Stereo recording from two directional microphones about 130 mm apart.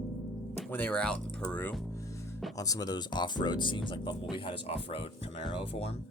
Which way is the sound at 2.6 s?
30° left (ahead or behind).